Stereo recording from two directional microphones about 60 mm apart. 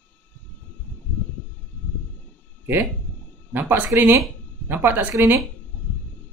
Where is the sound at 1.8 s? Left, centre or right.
Left.